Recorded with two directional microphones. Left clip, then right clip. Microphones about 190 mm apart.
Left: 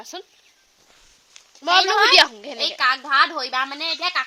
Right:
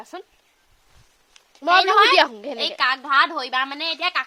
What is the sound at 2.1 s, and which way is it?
Speech, 50° right (ahead or behind).